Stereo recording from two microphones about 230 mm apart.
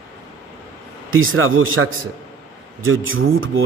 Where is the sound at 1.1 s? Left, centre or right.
Right.